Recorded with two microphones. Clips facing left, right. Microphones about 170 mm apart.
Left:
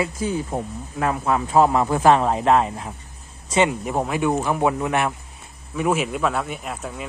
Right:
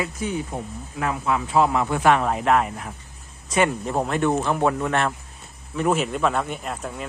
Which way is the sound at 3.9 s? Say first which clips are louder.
Even; 5° left (ahead or behind).